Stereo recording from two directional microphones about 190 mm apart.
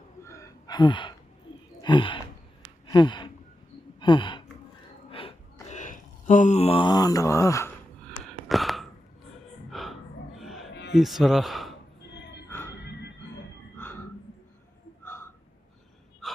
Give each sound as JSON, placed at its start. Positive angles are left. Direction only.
{"t": 0.2, "sound": "gasp", "side_deg": 15}
{"t": 1.8, "sound": "a sound", "side_deg": 25}
{"t": 2.8, "sound": "gasp", "side_deg": 20}
{"t": 4.0, "sound": "speech", "side_deg": 25}
{"t": 5.6, "sound": "mantra", "side_deg": 40}
{"t": 8.4, "sound": "gasp", "side_deg": 0}
{"t": 10.9, "sound": "speech", "side_deg": 0}
{"t": 12.5, "sound": "music", "side_deg": 10}
{"t": 16.2, "sound": "gasp", "side_deg": 0}